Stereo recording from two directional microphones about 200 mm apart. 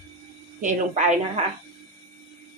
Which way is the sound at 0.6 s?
40° right (ahead or behind).